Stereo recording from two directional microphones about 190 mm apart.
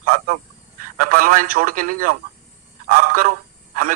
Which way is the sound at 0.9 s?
45° right (ahead or behind).